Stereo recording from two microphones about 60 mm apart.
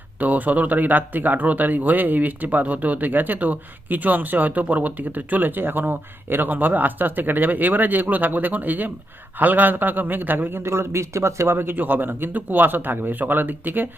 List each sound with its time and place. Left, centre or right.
0.2 s a man's voice: right